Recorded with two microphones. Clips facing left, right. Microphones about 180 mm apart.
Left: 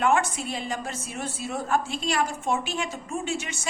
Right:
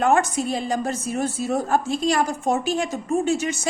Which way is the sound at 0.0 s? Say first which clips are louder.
Right 4 dB; 40° right (ahead or behind).